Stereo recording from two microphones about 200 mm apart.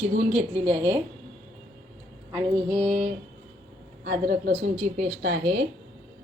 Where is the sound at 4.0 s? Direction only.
45° right (ahead or behind).